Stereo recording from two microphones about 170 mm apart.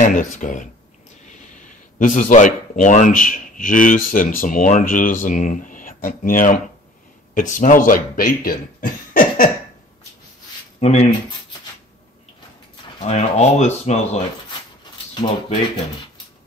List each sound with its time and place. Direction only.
0.0 s speech: 50° left (ahead or behind)
2.0 s speech: 50° left (ahead or behind)
10.8 s speech: 40° left (ahead or behind)
13.0 s speech: 40° left (ahead or behind)